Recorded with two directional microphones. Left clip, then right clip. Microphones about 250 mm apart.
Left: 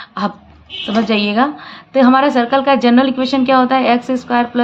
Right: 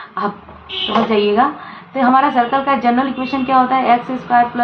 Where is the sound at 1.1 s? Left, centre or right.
Left.